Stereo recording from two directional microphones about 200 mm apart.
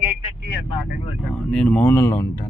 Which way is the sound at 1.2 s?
5° left (ahead or behind).